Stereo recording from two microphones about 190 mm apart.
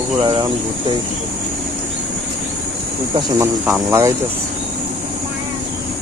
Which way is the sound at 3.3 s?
10° right (ahead or behind).